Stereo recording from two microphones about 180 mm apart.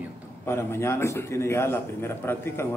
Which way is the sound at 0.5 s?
15° left (ahead or behind).